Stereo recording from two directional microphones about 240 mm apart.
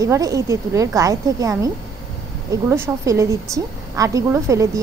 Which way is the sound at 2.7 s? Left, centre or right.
Centre.